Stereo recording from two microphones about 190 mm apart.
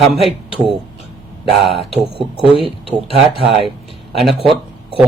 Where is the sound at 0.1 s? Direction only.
Centre (ahead or behind).